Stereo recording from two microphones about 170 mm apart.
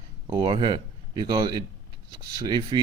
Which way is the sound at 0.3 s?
30° right (ahead or behind).